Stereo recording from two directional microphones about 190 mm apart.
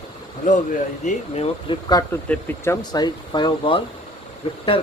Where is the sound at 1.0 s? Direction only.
35° left (ahead or behind).